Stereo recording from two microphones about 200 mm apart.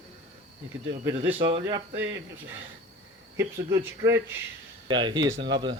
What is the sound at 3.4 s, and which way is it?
Speech, 15° right (ahead or behind).